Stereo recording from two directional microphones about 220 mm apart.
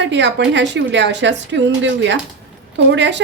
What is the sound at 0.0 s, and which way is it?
A woman's voice, 55° right (ahead or behind).